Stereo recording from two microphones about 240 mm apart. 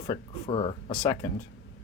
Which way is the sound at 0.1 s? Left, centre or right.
Left.